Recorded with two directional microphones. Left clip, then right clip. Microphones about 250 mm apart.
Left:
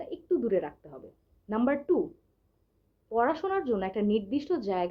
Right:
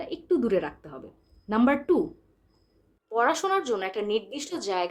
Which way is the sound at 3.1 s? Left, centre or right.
Centre.